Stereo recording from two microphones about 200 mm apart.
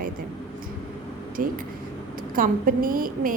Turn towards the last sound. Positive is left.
turn(degrees=-45)  # may be behind; listen again after turning